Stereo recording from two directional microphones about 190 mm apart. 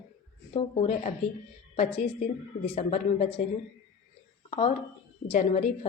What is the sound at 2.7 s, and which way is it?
Speech, 30° left (ahead or behind).